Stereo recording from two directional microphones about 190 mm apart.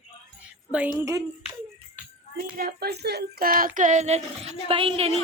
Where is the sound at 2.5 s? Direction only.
50° right (ahead or behind).